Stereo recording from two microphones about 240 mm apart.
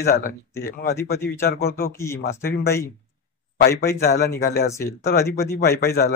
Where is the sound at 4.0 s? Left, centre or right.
Left.